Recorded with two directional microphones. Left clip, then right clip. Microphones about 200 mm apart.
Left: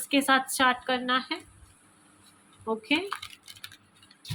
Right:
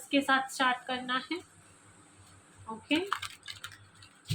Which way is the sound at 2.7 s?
55° left (ahead or behind).